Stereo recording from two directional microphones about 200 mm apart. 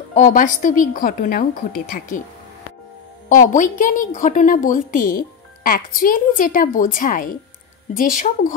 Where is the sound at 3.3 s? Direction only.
40° left (ahead or behind).